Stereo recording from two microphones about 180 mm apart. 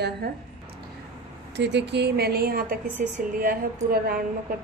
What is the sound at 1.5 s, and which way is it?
A woman's voice, 70° right (ahead or behind).